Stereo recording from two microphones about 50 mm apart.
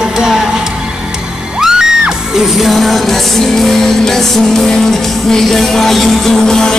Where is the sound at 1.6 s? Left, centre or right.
Centre.